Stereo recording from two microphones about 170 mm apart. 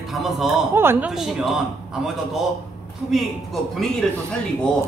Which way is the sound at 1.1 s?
Centre (ahead or behind).